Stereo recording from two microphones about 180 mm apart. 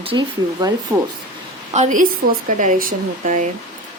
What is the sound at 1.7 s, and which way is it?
Speech, 45° right (ahead or behind).